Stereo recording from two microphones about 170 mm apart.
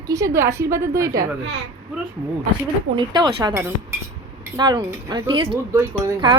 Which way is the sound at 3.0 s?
25° right (ahead or behind).